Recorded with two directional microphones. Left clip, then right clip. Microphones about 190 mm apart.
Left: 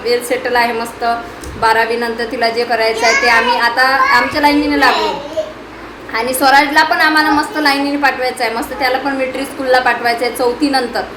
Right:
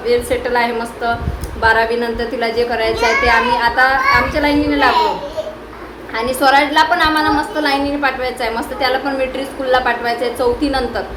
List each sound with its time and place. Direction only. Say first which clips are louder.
0.1 s a woman's voice: left 1 dB; 15° left (ahead or behind)
6.1 s a woman's voice: left 2 dB; 15° left (ahead or behind)